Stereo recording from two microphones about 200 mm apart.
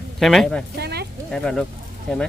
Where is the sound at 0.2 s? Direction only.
Centre (ahead or behind).